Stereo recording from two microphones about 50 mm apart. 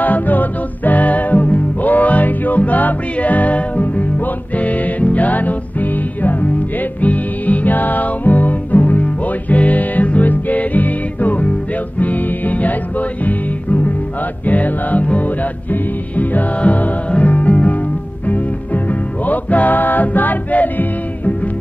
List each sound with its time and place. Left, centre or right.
0.0 s music: left